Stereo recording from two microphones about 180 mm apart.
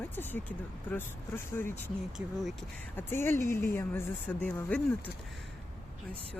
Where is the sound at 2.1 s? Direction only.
Centre (ahead or behind).